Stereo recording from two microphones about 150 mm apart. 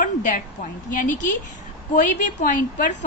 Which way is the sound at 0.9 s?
60° left (ahead or behind).